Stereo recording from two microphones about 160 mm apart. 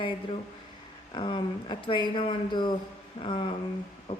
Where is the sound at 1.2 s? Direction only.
30° left (ahead or behind).